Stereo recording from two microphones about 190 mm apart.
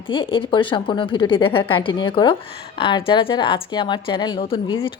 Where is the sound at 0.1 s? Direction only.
25° left (ahead or behind).